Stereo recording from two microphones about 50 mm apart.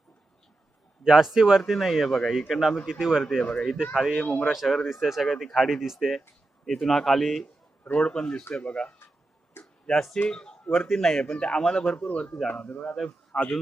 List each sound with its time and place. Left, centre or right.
1.0 s a man's voice: centre
2.8 s a man's voice: centre
3.5 s speech: centre
3.9 s a man's voice: centre
4.2 s speech: left
4.6 s speech: centre
6.7 s speech: centre
7.9 s speech: left
9.6 s a sound: left
9.9 s speech: centre
10.2 s speech: centre
12.5 s a man's voice: left
13.3 s speech: centre